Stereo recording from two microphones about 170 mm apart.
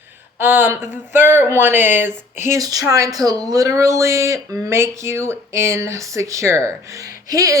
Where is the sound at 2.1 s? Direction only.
15° right (ahead or behind).